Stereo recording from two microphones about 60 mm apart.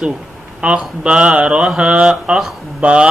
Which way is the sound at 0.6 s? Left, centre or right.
Right.